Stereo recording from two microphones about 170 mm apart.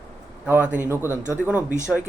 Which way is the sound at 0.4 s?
10° right (ahead or behind).